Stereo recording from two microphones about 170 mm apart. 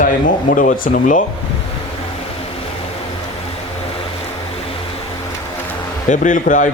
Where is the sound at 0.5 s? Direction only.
55° left (ahead or behind).